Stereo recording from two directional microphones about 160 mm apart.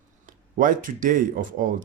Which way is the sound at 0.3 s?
55° right (ahead or behind).